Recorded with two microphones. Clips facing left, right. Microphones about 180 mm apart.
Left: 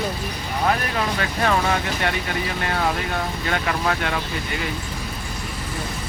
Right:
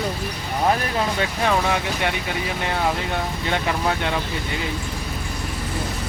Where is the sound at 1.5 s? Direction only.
15° right (ahead or behind).